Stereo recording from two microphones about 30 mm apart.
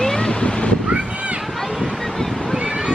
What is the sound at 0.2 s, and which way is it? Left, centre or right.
Waves, left.